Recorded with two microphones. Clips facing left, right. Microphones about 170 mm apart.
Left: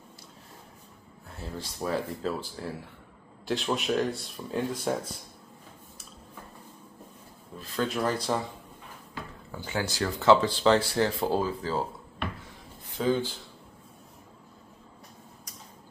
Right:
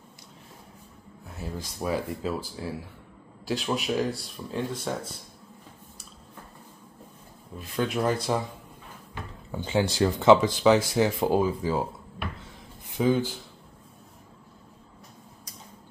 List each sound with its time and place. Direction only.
1.4 s speech: 10° right (ahead or behind)
7.5 s speech: 15° right (ahead or behind)